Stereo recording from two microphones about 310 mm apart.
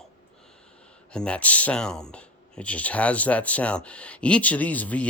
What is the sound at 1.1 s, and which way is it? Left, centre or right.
Speech, centre.